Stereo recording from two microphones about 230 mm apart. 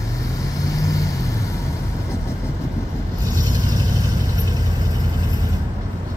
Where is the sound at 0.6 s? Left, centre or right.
Centre.